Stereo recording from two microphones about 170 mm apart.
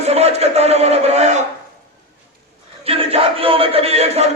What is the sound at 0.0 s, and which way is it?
A man's voice, 40° right (ahead or behind).